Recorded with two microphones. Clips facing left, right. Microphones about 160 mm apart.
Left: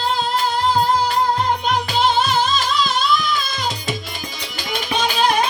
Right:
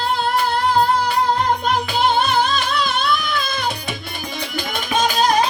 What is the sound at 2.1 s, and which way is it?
Music, 60° right (ahead or behind).